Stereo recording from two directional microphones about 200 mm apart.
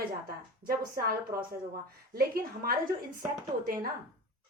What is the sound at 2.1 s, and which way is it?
Speech, 45° right (ahead or behind).